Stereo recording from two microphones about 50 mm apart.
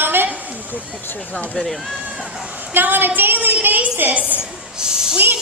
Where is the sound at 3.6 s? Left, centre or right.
Right.